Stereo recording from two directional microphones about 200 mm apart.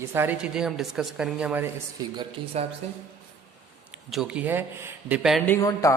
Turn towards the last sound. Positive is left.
turn(degrees=15)  # may be behind; listen again after turning